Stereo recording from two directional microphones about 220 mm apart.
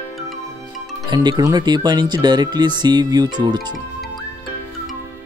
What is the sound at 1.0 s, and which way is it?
Speech, 20° right (ahead or behind).